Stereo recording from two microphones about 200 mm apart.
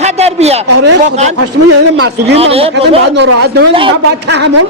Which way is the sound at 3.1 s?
60° right (ahead or behind).